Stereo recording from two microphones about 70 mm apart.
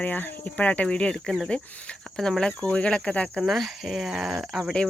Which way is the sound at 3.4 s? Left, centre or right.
Centre.